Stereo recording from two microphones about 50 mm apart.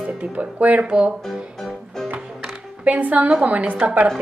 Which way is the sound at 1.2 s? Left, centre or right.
Centre.